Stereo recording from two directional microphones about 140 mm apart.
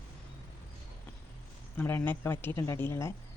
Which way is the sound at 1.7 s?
10° left (ahead or behind).